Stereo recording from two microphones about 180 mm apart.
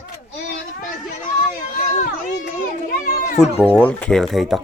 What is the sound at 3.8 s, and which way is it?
Speech, 10° left (ahead or behind).